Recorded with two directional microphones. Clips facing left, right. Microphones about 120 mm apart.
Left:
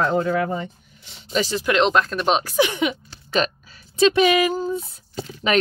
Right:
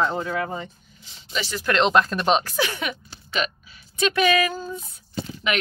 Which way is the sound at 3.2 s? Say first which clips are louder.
Left 5 dB; 35° left (ahead or behind).